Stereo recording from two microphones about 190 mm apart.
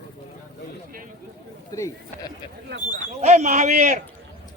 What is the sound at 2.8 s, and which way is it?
Speech, 40° right (ahead or behind).